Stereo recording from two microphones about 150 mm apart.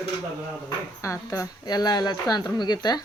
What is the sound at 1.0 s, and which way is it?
Speech, 20° left (ahead or behind).